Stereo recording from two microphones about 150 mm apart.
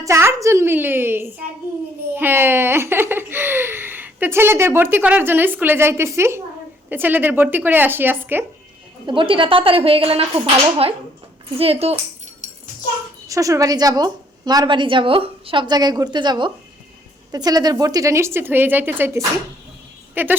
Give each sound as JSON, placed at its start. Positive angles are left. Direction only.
{"t": 0.0, "sound": "a woman's voice", "side_deg": -20}
{"t": 2.1, "sound": "giggle", "side_deg": -15}
{"t": 6.9, "sound": "a woman's voice", "side_deg": -15}
{"t": 9.0, "sound": "speech", "side_deg": -35}
{"t": 13.2, "sound": "a woman's voice", "side_deg": -20}